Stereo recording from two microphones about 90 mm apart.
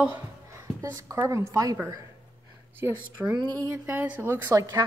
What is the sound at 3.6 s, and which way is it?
Speech, 35° right (ahead or behind).